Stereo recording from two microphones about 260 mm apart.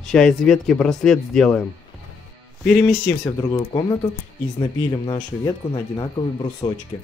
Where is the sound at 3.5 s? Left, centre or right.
Centre.